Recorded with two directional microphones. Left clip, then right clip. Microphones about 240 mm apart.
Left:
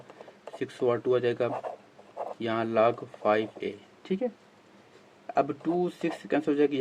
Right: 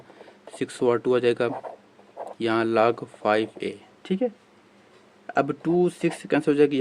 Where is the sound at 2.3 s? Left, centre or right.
Right.